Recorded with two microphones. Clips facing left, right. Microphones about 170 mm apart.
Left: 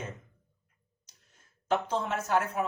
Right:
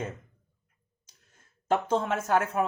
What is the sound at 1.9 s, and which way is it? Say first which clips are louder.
Speech: right 3 dB; 50° right (ahead or behind).